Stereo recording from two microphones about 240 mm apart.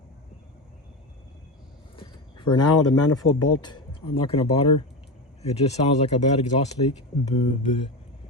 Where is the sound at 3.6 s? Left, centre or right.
Centre.